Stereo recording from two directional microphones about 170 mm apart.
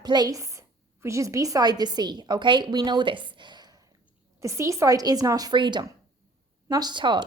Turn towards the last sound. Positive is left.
turn(degrees=-25)  # may be behind; listen again after turning